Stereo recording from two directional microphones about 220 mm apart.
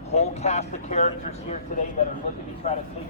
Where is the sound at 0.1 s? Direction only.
30° left (ahead or behind).